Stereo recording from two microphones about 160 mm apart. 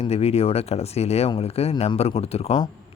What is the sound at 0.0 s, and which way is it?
Speech, 40° left (ahead or behind).